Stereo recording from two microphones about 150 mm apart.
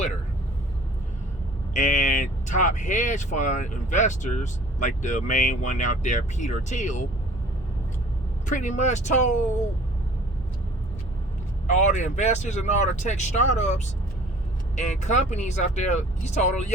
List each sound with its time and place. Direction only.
1.7 s speech: 55° left (ahead or behind)
8.4 s speech: 55° left (ahead or behind)
11.7 s speech: 50° left (ahead or behind)
15.0 s speech: 50° left (ahead or behind)